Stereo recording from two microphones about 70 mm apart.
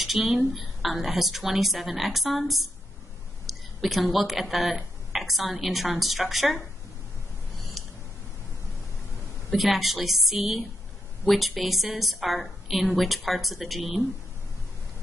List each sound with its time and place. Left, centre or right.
0.2 s a woman's voice: centre
7.8 s a sound: centre
9.5 s a woman's voice: centre